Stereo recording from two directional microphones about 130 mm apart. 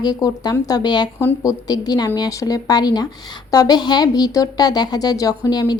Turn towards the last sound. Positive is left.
turn(degrees=30)  # may be behind; listen again after turning